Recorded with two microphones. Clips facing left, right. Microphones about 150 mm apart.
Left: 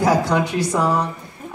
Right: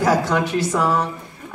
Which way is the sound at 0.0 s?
15° left (ahead or behind).